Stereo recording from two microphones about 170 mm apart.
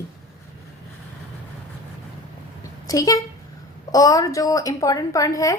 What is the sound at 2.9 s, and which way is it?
A woman's voice, 20° left (ahead or behind).